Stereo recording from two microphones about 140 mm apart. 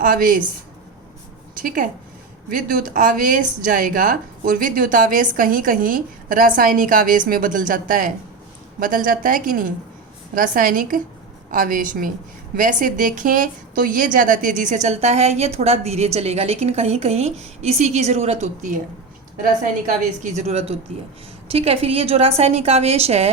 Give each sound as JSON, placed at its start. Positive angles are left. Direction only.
{"t": 0.0, "sound": "speech", "side_deg": -80}
{"t": 1.5, "sound": "a woman's voice", "side_deg": -75}
{"t": 20.2, "sound": "a woman's voice", "side_deg": -50}